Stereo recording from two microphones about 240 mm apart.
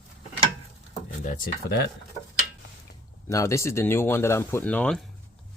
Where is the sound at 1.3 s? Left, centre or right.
Left.